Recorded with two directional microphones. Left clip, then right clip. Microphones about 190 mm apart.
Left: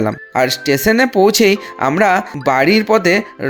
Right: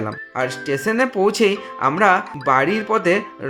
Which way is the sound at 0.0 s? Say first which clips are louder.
Left 8 dB; 30° left (ahead or behind).